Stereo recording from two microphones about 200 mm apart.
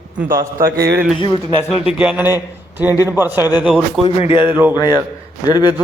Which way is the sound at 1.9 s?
5° right (ahead or behind).